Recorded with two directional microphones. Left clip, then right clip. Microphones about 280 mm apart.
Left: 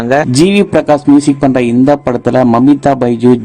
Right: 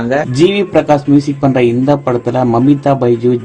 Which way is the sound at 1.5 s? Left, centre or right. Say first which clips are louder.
Left 2 dB; left.